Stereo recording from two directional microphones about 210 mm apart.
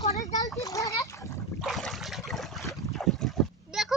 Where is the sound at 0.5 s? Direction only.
15° left (ahead or behind).